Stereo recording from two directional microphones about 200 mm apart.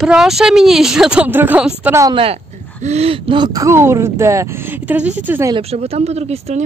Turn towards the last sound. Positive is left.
turn(degrees=-30)  # may be behind; listen again after turning